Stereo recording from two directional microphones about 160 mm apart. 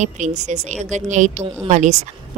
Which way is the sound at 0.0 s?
45° right (ahead or behind).